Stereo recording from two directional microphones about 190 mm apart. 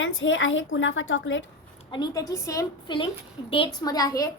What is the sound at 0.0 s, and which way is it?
A woman's voice, 90° left.